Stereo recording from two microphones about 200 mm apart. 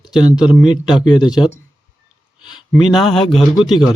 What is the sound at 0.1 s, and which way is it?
Speech, 5° right (ahead or behind).